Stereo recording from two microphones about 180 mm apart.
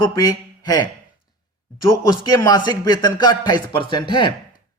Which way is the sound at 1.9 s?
20° left (ahead or behind).